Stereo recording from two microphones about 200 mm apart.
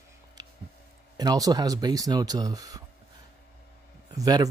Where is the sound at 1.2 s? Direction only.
20° right (ahead or behind).